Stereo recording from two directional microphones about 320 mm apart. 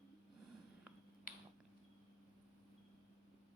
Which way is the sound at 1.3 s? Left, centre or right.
Left.